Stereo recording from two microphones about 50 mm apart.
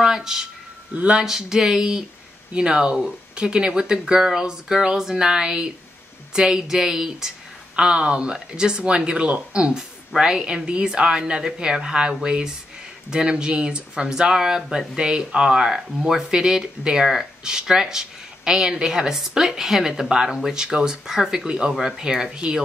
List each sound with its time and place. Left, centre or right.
0.0 s speech: centre
0.9 s speech: right
1.2 s speech: centre